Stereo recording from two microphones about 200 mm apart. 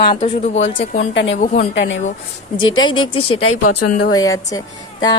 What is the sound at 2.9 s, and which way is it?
Speech, 25° left (ahead or behind).